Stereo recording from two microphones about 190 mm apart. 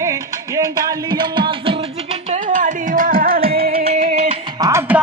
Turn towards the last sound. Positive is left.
turn(degrees=-15)  # may be behind; listen again after turning